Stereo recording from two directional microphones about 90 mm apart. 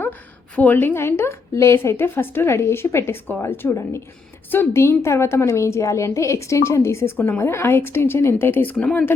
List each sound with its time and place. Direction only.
0.5 s a woman's voice: 20° left (ahead or behind)